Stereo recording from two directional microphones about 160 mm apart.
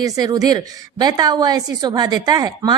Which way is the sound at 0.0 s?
20° right (ahead or behind).